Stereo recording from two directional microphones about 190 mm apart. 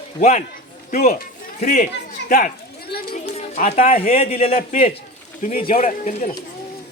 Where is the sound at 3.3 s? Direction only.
35° left (ahead or behind).